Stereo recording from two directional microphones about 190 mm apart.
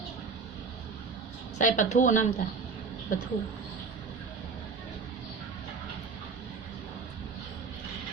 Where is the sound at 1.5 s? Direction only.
40° left (ahead or behind).